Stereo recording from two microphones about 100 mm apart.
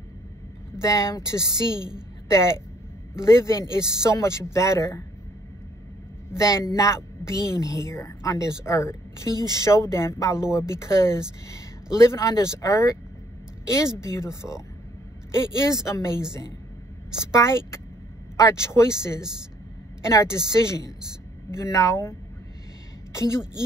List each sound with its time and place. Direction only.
0.7 s a woman's voice: 30° left (ahead or behind)
1.5 s a woman's voice: 45° right (ahead or behind)
2.2 s speech: 30° left (ahead or behind)
6.3 s a woman's voice: 30° left (ahead or behind)
9.3 s a woman's voice: 45° right (ahead or behind)
9.6 s speech: 30° left (ahead or behind)
15.9 s speech: 30° left (ahead or behind)
17.3 s a woman's voice: 30° left (ahead or behind)
23.1 s a woman's voice: 30° left (ahead or behind)